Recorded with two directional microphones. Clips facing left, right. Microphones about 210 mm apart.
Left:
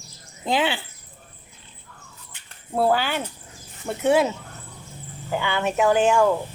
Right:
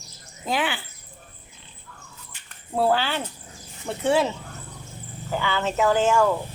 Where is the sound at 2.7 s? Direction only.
10° left (ahead or behind).